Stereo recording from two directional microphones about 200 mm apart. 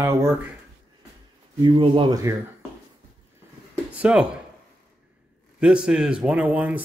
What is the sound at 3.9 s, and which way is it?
Speech, 5° right (ahead or behind).